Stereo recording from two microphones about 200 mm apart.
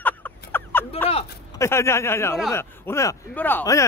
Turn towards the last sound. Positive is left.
turn(degrees=10)  # may be behind; listen again after turning